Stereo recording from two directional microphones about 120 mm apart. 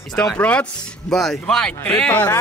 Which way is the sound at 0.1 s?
5° left (ahead or behind).